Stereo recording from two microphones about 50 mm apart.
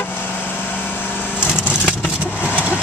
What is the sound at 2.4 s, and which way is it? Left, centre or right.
Vehicle, right.